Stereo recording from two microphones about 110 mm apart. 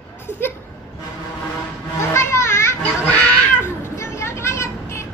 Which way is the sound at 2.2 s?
25° left (ahead or behind).